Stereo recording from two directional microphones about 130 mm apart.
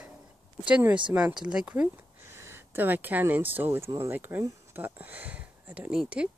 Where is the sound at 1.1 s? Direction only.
10° right (ahead or behind).